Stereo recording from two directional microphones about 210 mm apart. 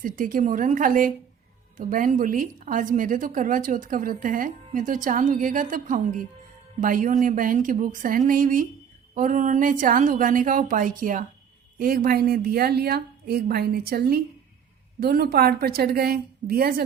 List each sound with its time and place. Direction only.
0.0 s a woman's voice: 40° right (ahead or behind)